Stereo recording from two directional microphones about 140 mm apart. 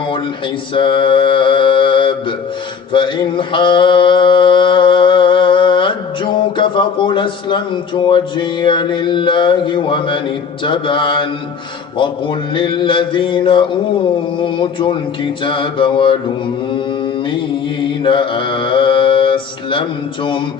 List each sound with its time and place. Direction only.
0.7 s mantra: 35° left (ahead or behind)
18.0 s mantra: 35° left (ahead or behind)